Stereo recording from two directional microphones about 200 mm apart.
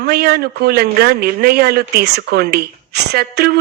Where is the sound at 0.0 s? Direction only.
50° right (ahead or behind).